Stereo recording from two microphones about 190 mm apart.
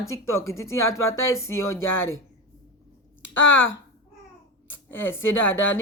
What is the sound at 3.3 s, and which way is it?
Speech, 85° left.